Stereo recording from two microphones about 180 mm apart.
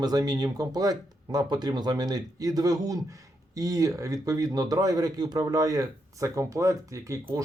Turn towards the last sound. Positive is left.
turn(degrees=-15)  # may be behind; listen again after turning